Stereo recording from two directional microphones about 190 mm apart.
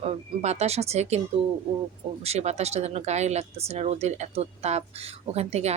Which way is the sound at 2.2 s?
35° right (ahead or behind).